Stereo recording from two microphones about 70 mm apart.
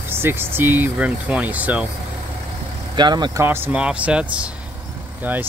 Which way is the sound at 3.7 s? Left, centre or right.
Centre.